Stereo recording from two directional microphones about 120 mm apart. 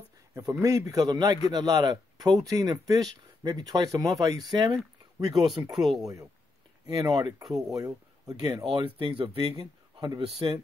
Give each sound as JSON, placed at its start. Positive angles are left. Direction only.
{"t": 0.3, "sound": "speech", "side_deg": -30}
{"t": 5.3, "sound": "speech", "side_deg": 0}
{"t": 6.9, "sound": "speech", "side_deg": -35}
{"t": 7.4, "sound": "speech", "side_deg": 0}
{"t": 7.7, "sound": "speech", "side_deg": -30}
{"t": 8.8, "sound": "speech", "side_deg": -45}
{"t": 9.6, "sound": "speech", "side_deg": -35}